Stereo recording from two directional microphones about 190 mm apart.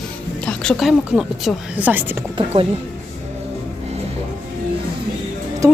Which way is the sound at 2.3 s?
30° right (ahead or behind).